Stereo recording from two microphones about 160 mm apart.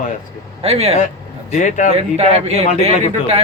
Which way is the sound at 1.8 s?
45° right (ahead or behind).